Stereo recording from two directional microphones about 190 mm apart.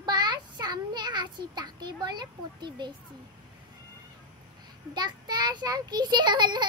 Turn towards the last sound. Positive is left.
turn(degrees=-25)  # may be behind; listen again after turning